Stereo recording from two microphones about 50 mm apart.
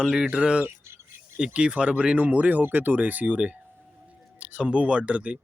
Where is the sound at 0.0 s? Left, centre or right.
Centre; by 2.6 s right.